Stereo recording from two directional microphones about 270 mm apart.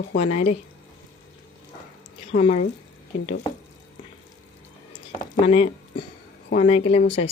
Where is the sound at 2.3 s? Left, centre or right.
Left.